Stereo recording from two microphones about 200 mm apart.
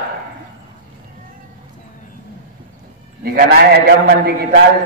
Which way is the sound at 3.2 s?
50° right (ahead or behind).